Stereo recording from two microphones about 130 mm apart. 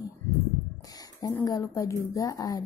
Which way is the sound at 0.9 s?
30° left (ahead or behind).